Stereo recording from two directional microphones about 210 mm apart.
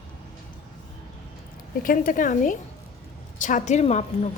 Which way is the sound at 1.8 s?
40° left (ahead or behind).